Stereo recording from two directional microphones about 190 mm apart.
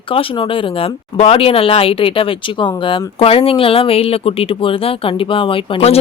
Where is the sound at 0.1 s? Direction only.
30° left (ahead or behind).